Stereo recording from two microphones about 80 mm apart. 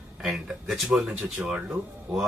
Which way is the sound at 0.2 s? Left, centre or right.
Centre.